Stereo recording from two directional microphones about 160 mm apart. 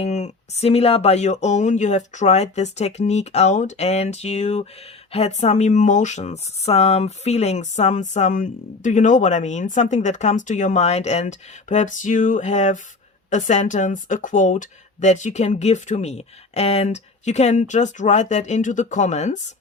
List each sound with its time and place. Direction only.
0.0 s speech: 45° left (ahead or behind)